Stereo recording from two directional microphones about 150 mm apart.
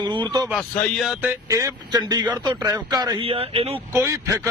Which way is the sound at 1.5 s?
20° right (ahead or behind).